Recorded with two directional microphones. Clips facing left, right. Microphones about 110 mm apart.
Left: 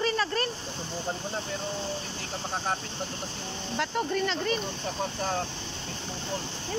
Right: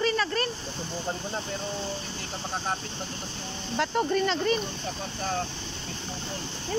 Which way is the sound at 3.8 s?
30° right (ahead or behind).